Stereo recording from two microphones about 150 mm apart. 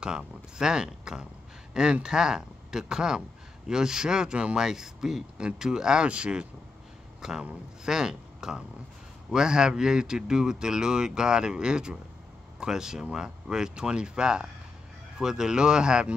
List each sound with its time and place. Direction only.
0.0 s speech: 5° right (ahead or behind)